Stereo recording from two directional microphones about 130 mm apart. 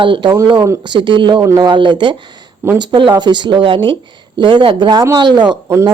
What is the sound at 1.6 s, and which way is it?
Speech, 35° right (ahead or behind).